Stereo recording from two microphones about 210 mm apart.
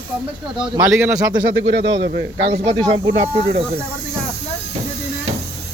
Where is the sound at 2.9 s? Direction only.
25° right (ahead or behind).